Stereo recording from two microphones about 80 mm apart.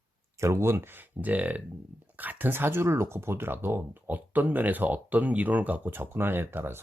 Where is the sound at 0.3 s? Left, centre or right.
Right.